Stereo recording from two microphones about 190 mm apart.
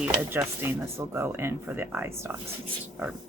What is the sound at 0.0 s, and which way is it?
Speech, 5° right (ahead or behind).